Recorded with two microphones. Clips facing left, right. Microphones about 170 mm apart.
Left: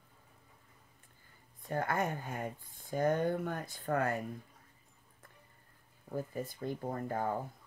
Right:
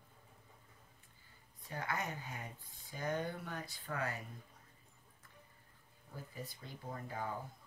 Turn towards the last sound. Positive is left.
turn(degrees=50)  # may be behind; listen again after turning